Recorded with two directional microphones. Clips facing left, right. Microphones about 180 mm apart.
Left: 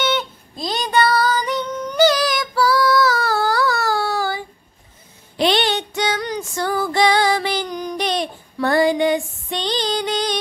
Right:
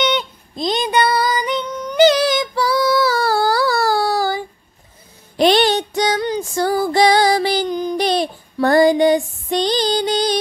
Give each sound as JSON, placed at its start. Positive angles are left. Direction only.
{"t": 0.7, "sound": "female singing", "side_deg": -20}
{"t": 5.4, "sound": "music", "side_deg": -40}